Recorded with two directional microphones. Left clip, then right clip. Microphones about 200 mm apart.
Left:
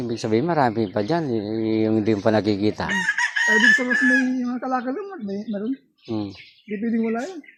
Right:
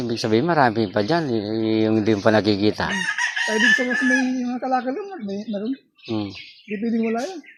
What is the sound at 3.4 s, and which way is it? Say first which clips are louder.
Chicken: left 2 dB; 20° left (ahead or behind).